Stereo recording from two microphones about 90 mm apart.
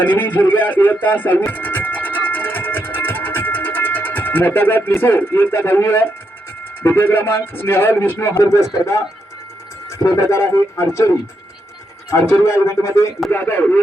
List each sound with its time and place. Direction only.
0.0 s speech: 20° left (ahead or behind)
1.0 s music: 20° left (ahead or behind)
4.9 s speech: 25° left (ahead or behind)
10.0 s speech: 30° left (ahead or behind)
12.3 s speech: 30° left (ahead or behind)